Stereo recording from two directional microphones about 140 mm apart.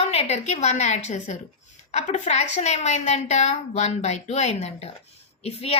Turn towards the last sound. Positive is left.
turn(degrees=45)  # may be behind; listen again after turning